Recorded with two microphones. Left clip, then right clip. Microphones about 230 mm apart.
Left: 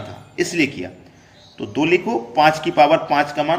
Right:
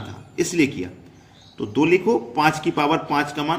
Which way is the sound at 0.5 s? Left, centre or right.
Right.